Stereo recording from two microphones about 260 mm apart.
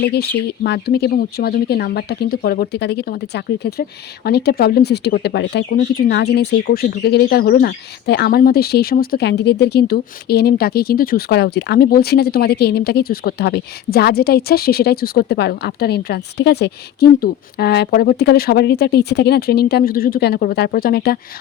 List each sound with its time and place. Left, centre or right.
0.0 s speech: left